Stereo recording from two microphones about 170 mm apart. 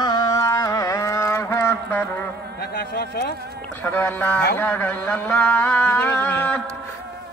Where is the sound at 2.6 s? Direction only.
65° left (ahead or behind).